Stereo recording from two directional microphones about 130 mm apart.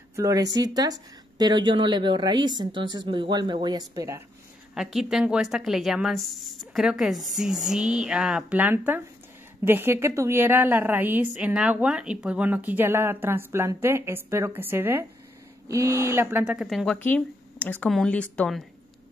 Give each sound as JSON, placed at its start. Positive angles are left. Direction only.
{"t": 0.1, "sound": "speech", "side_deg": -25}
{"t": 4.7, "sound": "speech", "side_deg": -5}
{"t": 16.4, "sound": "speech", "side_deg": 0}